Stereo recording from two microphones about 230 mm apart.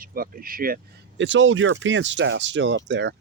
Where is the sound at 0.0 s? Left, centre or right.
Right.